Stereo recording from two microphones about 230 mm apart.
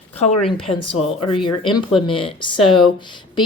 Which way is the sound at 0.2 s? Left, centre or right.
Left.